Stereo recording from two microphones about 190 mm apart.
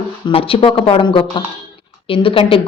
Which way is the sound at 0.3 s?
30° left (ahead or behind).